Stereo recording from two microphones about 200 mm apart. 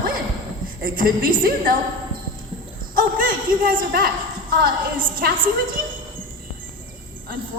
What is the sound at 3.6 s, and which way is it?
A woman's voice, 45° right (ahead or behind).